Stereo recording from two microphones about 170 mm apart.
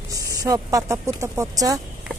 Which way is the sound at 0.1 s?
20° right (ahead or behind).